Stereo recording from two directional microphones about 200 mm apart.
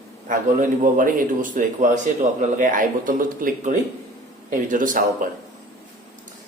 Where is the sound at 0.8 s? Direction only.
40° right (ahead or behind).